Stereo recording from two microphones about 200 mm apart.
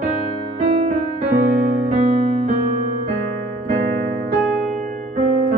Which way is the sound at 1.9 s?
35° right (ahead or behind).